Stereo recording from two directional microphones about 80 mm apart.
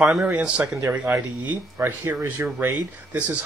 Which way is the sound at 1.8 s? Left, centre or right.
Right.